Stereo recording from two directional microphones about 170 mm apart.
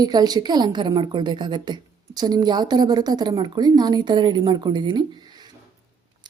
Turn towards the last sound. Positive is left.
turn(degrees=-25)  # may be behind; listen again after turning